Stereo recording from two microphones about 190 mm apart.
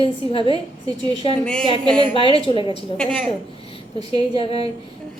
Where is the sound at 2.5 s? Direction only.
25° left (ahead or behind).